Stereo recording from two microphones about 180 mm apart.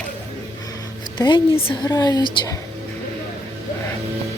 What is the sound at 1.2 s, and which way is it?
A woman's voice, 25° left (ahead or behind).